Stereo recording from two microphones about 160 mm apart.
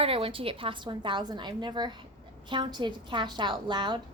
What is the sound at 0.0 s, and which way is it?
A woman's voice, 35° right (ahead or behind).